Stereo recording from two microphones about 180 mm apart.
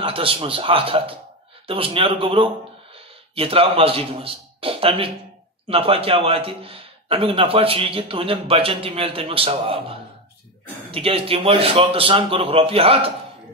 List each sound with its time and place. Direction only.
0.0 s a man's voice: 30° right (ahead or behind)